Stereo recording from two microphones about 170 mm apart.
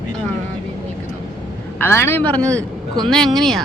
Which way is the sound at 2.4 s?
20° right (ahead or behind).